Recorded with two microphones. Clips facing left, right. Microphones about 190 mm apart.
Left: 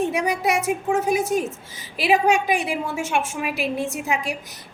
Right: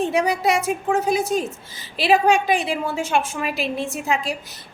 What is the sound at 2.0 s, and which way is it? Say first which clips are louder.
A woman's voice: right 2 dB; 10° left (ahead or behind).